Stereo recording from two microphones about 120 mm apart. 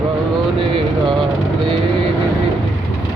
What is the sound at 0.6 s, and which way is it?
Vehicle, 45° right (ahead or behind).